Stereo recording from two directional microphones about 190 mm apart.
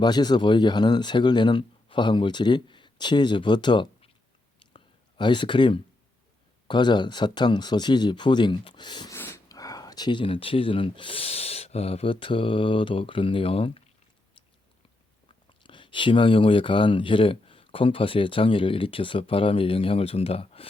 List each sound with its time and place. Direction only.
0.0 s speech: 20° left (ahead or behind)
4.7 s a sound: 25° left (ahead or behind)
6.7 s speech: 25° left (ahead or behind)
15.3 s speech: 25° left (ahead or behind)